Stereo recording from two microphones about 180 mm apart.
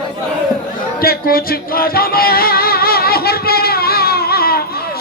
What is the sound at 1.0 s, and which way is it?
Music, 55° left (ahead or behind).